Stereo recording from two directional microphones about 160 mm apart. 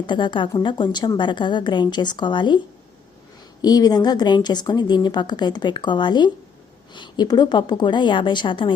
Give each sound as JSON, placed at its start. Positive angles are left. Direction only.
{"t": 0.1, "sound": "speech", "side_deg": 30}
{"t": 3.6, "sound": "speech", "side_deg": 25}